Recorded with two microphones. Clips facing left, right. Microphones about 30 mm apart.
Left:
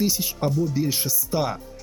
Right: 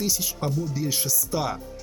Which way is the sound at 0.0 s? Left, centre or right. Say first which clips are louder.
Left 4 dB; left.